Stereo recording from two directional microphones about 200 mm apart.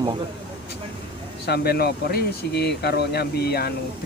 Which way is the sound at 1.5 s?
50° left (ahead or behind).